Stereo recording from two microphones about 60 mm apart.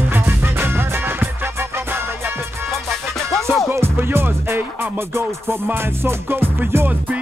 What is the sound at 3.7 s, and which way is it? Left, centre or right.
Music, right.